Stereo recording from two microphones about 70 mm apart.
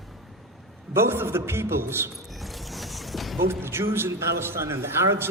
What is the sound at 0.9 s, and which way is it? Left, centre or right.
A man's voice, right.